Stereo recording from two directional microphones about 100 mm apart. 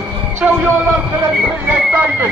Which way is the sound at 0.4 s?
10° right (ahead or behind).